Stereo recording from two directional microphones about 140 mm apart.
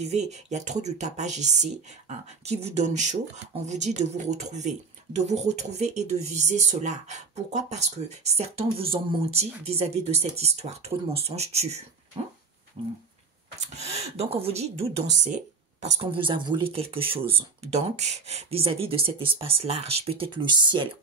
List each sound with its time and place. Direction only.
0.0 s speech: 55° right (ahead or behind)
13.7 s speech: 50° right (ahead or behind)
16.1 s speech: 35° right (ahead or behind)